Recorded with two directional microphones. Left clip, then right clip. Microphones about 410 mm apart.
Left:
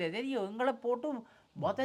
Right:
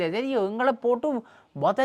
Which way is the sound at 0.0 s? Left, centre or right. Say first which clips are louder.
Right 10 dB; right.